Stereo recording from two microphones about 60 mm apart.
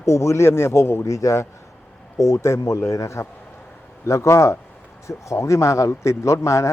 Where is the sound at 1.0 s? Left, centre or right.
Left.